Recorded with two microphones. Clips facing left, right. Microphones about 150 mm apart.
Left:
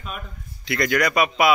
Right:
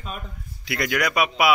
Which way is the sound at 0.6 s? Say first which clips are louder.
Left 3 dB; 5° right (ahead or behind).